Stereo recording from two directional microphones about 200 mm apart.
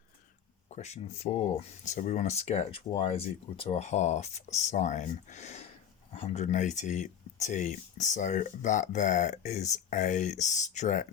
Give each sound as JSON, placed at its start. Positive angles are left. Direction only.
{"t": 0.7, "sound": "speech", "side_deg": 35}